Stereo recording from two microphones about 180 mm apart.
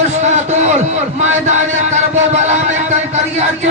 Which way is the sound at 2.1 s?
40° right (ahead or behind).